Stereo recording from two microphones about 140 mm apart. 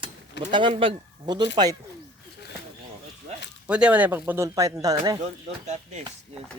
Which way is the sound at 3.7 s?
10° right (ahead or behind).